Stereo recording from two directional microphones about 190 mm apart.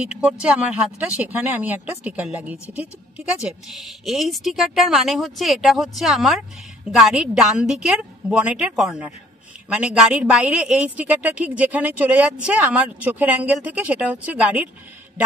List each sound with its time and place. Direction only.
0.0 s a woman's voice: 5° right (ahead or behind)